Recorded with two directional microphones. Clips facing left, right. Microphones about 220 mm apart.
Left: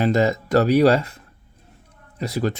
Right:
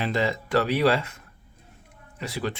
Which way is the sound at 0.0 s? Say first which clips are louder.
Left 7 dB; 45° left (ahead or behind).